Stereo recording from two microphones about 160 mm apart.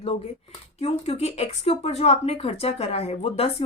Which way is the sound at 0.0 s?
35° left (ahead or behind).